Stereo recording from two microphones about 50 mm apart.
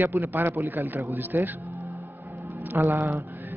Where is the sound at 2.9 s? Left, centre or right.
Right.